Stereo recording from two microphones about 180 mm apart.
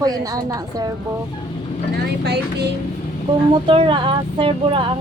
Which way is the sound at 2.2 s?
65° right (ahead or behind).